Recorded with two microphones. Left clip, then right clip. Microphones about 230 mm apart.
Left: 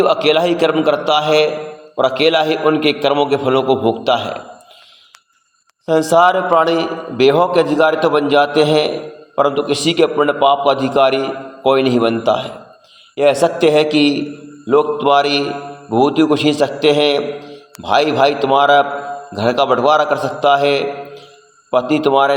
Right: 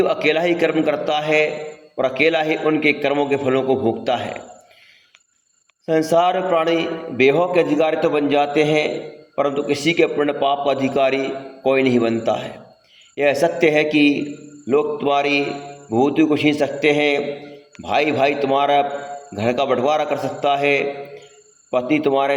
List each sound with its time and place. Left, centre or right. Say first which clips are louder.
0.0 s a man's voice: left 5 dB; left
5.8 s a man's voice: left 5 dB; left